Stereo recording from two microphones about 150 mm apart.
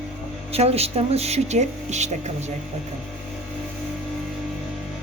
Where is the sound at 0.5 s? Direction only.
45° right (ahead or behind).